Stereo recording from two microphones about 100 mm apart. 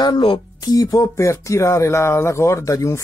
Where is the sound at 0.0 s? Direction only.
55° left (ahead or behind).